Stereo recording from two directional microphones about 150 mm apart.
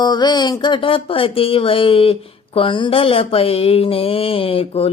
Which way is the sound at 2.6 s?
35° left (ahead or behind).